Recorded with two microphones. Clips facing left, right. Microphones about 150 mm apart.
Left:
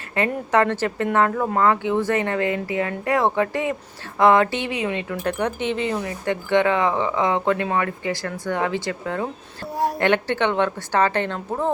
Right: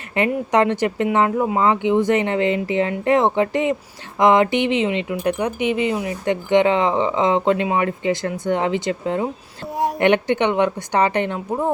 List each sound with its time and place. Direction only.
0.1 s a woman's voice: 20° right (ahead or behind)